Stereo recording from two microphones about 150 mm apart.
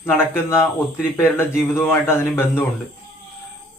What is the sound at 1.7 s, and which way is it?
Mantra, 15° left (ahead or behind).